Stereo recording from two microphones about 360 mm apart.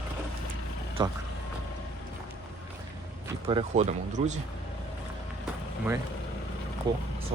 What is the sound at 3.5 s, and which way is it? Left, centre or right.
Speech, centre.